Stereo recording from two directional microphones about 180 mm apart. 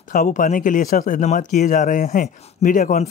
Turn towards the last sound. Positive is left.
turn(degrees=45)  # may be behind; listen again after turning